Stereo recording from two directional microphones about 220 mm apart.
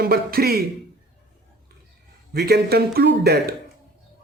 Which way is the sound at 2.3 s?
45° right (ahead or behind).